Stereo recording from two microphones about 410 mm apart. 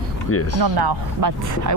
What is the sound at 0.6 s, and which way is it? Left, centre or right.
Speech, right.